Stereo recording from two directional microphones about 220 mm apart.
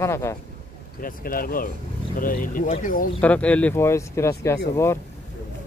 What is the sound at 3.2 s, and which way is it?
Speech, 5° left (ahead or behind).